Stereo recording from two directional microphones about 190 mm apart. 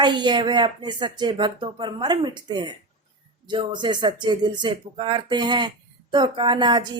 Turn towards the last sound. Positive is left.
turn(degrees=-25)  # may be behind; listen again after turning